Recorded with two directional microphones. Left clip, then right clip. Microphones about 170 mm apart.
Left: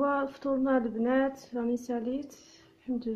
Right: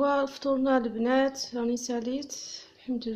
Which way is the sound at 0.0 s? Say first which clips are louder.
Right 3 dB; 5° right (ahead or behind).